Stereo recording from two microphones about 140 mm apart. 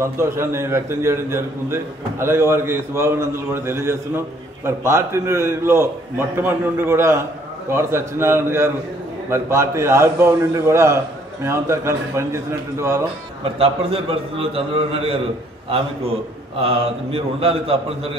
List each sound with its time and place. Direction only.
0.0 s a man's voice: 20° right (ahead or behind)
13.4 s a man's voice: 45° right (ahead or behind)
16.6 s a man's voice: 40° right (ahead or behind)